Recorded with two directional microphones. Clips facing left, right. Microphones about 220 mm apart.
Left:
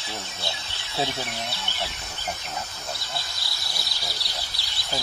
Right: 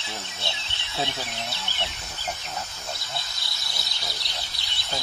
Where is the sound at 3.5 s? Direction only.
20° right (ahead or behind).